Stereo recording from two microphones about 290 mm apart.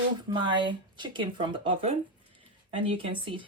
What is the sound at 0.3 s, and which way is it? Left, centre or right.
Speech, centre.